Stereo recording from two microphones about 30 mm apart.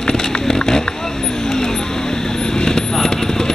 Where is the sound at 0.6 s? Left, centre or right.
Centre.